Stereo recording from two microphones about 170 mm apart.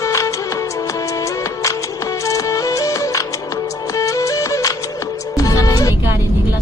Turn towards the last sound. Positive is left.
turn(degrees=20)  # may be behind; listen again after turning